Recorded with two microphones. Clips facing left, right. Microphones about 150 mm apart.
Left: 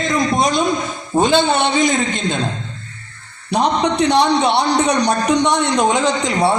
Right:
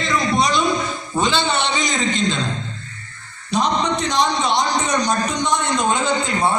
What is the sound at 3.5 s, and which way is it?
A man's voice, 65° left (ahead or behind).